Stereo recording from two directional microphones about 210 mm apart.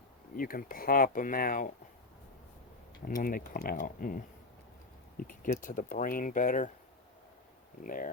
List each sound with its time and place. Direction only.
0.3 s speech: 45° left (ahead or behind)
3.1 s speech: 40° left (ahead or behind)
7.9 s speech: 40° left (ahead or behind)